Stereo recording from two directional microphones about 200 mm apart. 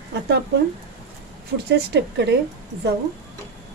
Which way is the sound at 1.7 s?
60° right (ahead or behind).